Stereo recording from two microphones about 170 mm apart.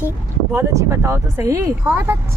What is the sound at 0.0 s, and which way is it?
Speech, 15° right (ahead or behind).